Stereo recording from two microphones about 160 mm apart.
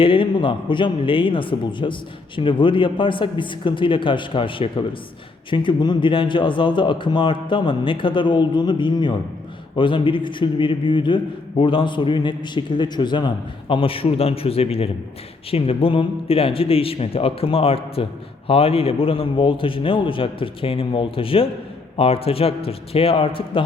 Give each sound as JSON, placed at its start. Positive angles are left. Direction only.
{"t": 0.0, "sound": "a man's voice", "side_deg": 35}